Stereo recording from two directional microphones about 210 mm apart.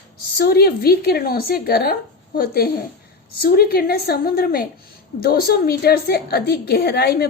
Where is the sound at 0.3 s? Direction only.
45° left (ahead or behind).